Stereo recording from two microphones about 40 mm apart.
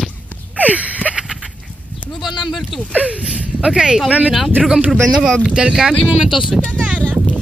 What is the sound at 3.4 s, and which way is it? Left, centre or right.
Speech, right.